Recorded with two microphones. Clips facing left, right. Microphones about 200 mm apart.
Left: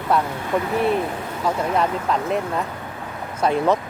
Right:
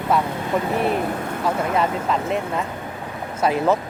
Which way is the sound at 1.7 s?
Centre (ahead or behind).